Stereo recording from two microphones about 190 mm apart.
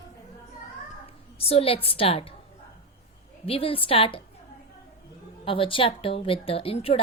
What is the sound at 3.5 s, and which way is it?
Speech, 30° left (ahead or behind).